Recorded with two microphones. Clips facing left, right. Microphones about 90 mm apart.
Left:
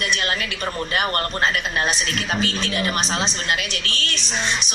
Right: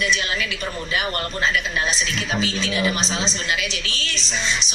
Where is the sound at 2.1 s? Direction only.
55° left (ahead or behind).